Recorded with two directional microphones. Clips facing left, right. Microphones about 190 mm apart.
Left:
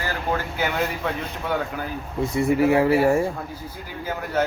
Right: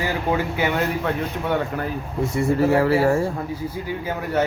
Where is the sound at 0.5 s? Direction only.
Centre (ahead or behind).